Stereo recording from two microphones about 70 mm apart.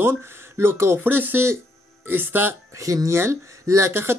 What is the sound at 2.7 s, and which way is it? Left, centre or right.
Speech, right.